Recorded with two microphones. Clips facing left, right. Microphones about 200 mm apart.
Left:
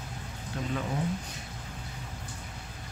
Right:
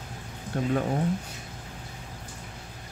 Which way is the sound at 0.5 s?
50° right (ahead or behind).